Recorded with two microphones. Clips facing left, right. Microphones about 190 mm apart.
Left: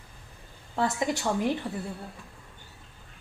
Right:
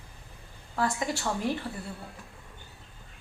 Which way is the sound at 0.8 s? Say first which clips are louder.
Left 2 dB; 20° left (ahead or behind).